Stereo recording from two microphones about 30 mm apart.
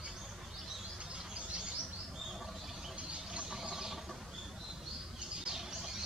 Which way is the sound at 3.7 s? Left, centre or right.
Centre.